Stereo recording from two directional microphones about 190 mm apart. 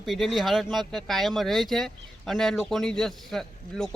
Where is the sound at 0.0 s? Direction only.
Centre (ahead or behind).